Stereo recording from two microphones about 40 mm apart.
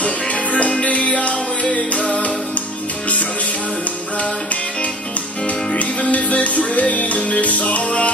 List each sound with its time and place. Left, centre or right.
0.0 s music: left
5.7 s music: left